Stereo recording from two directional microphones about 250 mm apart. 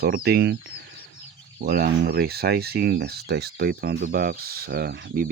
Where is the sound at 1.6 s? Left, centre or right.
Right.